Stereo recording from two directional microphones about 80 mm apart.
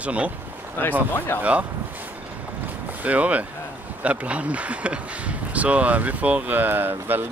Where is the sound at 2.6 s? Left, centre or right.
Right.